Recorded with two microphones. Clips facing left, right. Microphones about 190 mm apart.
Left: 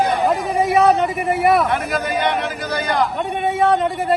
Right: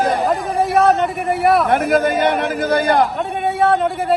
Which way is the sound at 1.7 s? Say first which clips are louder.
Right 6 dB; 55° right (ahead or behind).